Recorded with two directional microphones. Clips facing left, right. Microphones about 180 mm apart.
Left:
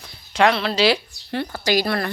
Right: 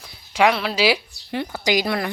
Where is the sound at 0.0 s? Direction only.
5° right (ahead or behind).